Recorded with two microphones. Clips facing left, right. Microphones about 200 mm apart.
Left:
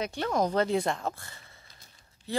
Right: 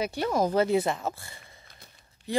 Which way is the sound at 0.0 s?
5° right (ahead or behind).